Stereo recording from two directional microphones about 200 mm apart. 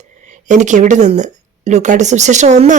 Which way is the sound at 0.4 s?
35° right (ahead or behind).